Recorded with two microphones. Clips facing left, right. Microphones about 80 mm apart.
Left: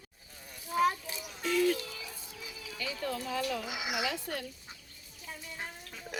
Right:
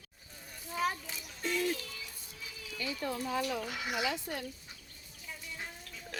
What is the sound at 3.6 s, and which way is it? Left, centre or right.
Speech, centre.